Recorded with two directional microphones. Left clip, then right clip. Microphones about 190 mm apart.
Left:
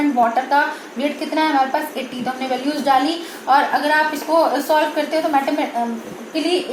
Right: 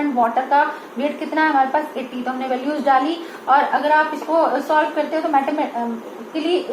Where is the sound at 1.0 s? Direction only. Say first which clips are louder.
Even; 30° left (ahead or behind).